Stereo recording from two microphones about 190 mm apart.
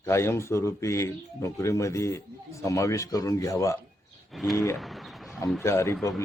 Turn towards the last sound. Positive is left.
turn(degrees=15)  # may be behind; listen again after turning